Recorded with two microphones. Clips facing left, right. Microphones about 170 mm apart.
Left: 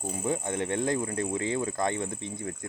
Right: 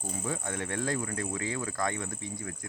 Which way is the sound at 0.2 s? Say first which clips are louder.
Left 6 dB; 20° left (ahead or behind).